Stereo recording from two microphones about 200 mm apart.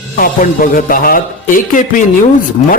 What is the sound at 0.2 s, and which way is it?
A man's voice, 45° left (ahead or behind).